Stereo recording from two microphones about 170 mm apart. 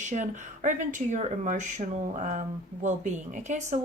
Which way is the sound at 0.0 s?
45° right (ahead or behind).